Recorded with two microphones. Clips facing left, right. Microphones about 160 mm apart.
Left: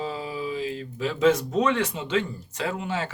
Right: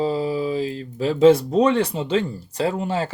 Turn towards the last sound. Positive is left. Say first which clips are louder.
# right 6 dB
turn(degrees=-35)  # may be behind; listen again after turning